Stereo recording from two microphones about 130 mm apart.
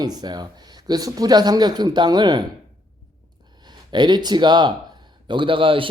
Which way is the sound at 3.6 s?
35° right (ahead or behind).